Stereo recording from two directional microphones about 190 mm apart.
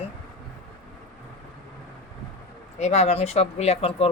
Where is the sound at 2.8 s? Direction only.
35° left (ahead or behind).